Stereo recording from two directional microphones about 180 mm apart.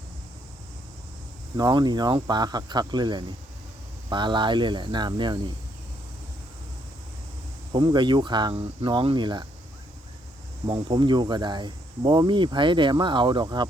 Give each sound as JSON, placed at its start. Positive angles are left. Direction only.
{"t": 1.5, "sound": "speech", "side_deg": -20}
{"t": 7.7, "sound": "speech", "side_deg": -25}
{"t": 10.7, "sound": "speech", "side_deg": -30}